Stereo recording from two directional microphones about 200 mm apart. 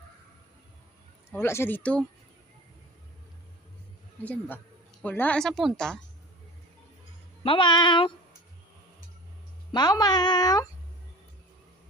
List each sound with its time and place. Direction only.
1.3 s speech: 10° left (ahead or behind)
4.2 s a woman's voice: 5° left (ahead or behind)
7.4 s speech: 25° left (ahead or behind)
9.7 s speech: 20° left (ahead or behind)